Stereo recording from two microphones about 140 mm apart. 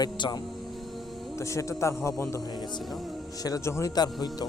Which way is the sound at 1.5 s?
20° left (ahead or behind).